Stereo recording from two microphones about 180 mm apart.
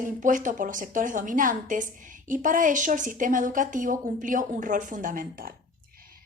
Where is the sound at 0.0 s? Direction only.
45° right (ahead or behind).